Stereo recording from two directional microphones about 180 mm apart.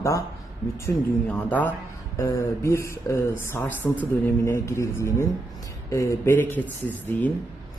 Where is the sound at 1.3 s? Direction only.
10° left (ahead or behind).